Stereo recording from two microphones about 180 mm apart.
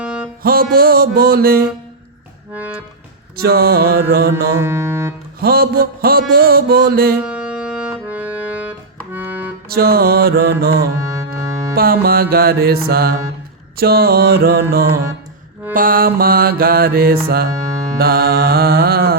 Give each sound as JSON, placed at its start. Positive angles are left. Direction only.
{"t": 0.0, "sound": "music", "side_deg": -5}
{"t": 0.4, "sound": "mantra", "side_deg": -55}
{"t": 2.5, "sound": "music", "side_deg": -10}
{"t": 3.3, "sound": "mantra", "side_deg": -60}
{"t": 4.5, "sound": "music", "side_deg": -15}
{"t": 5.4, "sound": "mantra", "side_deg": -60}
{"t": 7.2, "sound": "music", "side_deg": -5}
{"t": 9.1, "sound": "accordion", "side_deg": -10}
{"t": 9.6, "sound": "mantra", "side_deg": -60}
{"t": 10.9, "sound": "music", "side_deg": -15}
{"t": 11.8, "sound": "mantra", "side_deg": -55}
{"t": 17.5, "sound": "music", "side_deg": -20}
{"t": 18.0, "sound": "mantra", "side_deg": -60}